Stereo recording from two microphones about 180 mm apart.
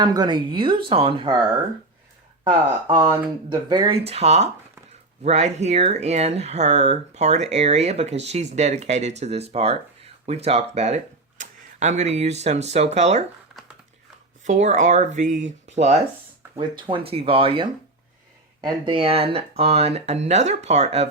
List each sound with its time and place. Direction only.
0.0 s speech: 20° right (ahead or behind)
2.4 s speech: 25° right (ahead or behind)
4.0 s speech: 35° right (ahead or behind)
14.4 s speech: 40° right (ahead or behind)